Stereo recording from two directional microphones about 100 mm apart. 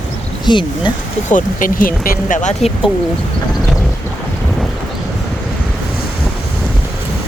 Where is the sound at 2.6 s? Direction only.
90° left.